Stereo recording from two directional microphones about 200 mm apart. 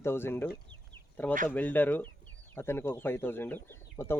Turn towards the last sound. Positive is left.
turn(degrees=10)  # may be behind; listen again after turning